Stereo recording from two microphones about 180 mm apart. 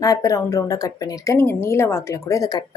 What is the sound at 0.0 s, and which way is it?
A woman's voice, 20° left (ahead or behind).